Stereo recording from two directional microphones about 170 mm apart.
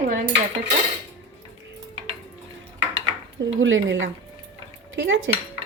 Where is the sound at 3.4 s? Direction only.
90° right.